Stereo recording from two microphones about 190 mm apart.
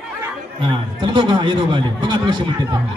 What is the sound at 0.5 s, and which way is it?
Speech, 25° right (ahead or behind).